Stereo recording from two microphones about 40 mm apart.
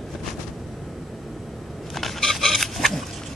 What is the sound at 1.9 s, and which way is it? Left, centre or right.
Pig, centre.